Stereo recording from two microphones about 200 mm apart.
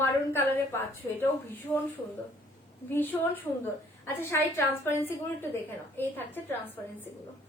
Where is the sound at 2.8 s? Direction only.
10° left (ahead or behind).